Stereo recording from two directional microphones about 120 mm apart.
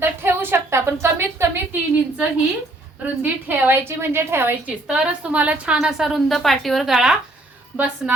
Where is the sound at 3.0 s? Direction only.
15° right (ahead or behind).